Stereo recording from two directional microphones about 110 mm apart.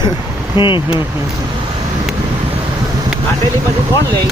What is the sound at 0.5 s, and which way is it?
Speech, 50° left (ahead or behind).